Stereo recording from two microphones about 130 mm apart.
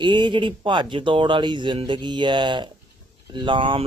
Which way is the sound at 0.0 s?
40° right (ahead or behind).